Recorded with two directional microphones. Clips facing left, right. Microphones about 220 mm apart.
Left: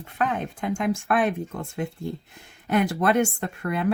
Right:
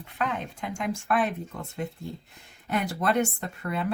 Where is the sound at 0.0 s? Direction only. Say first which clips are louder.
Left 4 dB; 50° left (ahead or behind).